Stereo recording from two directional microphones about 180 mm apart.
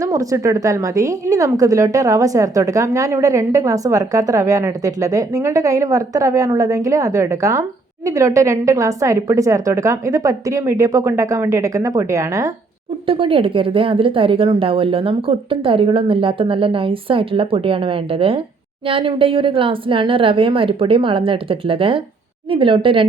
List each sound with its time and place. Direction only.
0.0 s a woman's voice: 20° right (ahead or behind)
13.1 s a woman's voice: 30° right (ahead or behind)